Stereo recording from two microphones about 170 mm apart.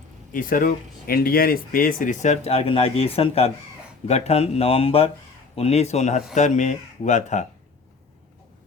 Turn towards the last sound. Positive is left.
turn(degrees=45)  # may be behind; listen again after turning